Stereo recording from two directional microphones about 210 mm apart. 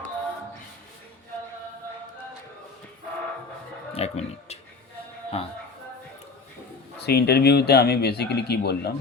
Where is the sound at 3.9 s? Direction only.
30° left (ahead or behind).